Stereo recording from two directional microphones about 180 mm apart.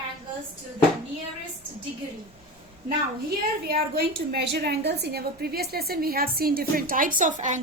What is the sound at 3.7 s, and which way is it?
A woman's voice, 60° right (ahead or behind).